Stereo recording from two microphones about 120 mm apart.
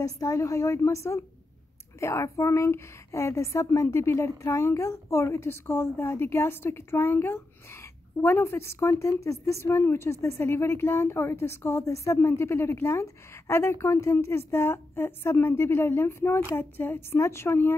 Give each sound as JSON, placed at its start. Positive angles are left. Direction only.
{"t": 0.0, "sound": "a woman's voice", "side_deg": 25}